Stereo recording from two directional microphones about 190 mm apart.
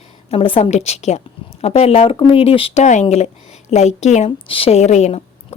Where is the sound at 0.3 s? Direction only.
30° left (ahead or behind).